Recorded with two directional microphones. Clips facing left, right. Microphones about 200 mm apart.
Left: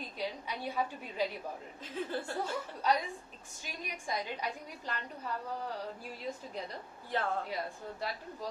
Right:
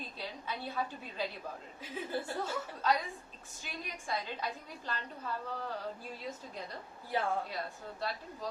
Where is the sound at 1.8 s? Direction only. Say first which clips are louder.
Left 1 dB; 10° right (ahead or behind).